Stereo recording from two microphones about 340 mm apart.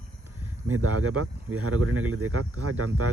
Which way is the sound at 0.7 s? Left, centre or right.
Right.